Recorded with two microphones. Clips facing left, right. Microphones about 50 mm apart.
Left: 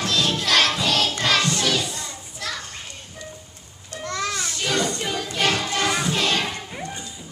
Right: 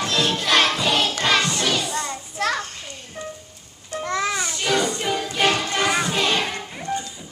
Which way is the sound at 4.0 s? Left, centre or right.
Centre.